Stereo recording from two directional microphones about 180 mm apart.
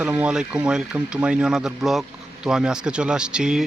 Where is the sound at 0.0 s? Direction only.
10° right (ahead or behind).